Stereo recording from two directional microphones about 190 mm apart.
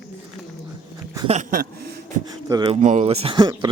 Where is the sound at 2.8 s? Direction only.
35° right (ahead or behind).